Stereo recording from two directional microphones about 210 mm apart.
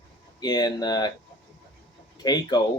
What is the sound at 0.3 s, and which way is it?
Speech, 20° left (ahead or behind).